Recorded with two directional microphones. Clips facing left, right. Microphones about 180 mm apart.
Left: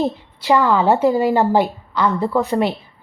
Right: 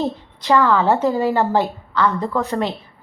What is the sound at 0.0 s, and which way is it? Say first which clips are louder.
A woman's voice: left 2 dB; 15° left (ahead or behind).